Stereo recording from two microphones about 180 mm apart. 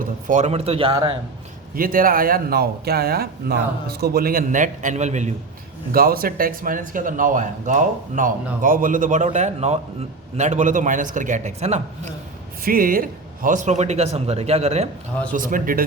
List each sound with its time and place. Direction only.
0.0 s speech: 45° right (ahead or behind); by 1.1 s 30° right (ahead or behind)
1.7 s speech: 50° right (ahead or behind)
5.9 s speech: 55° right (ahead or behind); by 12.1 s 40° right (ahead or behind)
12.6 s speech: 50° right (ahead or behind); by 14.8 s 35° right (ahead or behind)
15.3 s speech: 50° right (ahead or behind)